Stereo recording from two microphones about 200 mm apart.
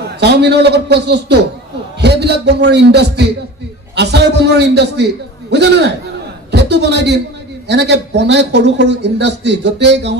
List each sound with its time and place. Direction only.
0.2 s a man's voice: 55° right (ahead or behind)